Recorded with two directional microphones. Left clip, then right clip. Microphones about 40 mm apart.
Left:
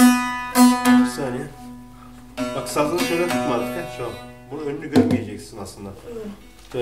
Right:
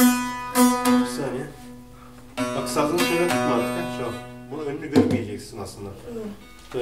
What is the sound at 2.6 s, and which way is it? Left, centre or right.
Music, left.